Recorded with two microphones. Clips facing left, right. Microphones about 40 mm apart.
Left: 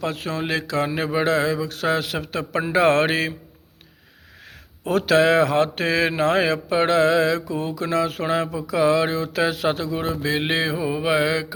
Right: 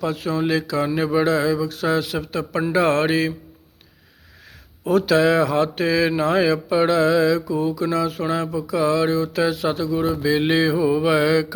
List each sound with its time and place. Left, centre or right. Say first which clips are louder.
0.0 s speech: right 4 dB; left
1.6 s mantra: right 1 dB; left
4.9 s speech: right 1 dB; left
10.2 s mantra: right 4 dB; left